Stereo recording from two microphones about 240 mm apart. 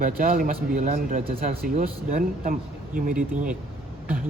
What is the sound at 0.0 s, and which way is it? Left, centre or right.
Speech, right.